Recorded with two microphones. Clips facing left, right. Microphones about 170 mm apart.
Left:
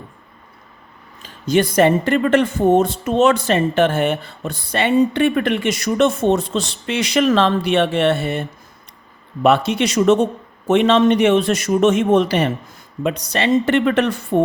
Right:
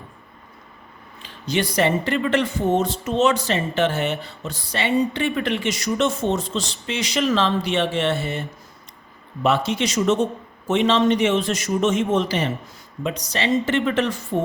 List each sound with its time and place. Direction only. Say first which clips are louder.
1.2 s speech: left 7 dB; 50° left (ahead or behind)